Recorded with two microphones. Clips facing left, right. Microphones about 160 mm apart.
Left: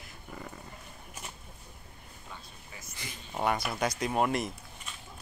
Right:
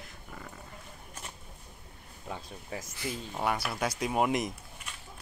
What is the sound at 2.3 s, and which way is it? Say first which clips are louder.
Speech: right 10 dB; 90° right.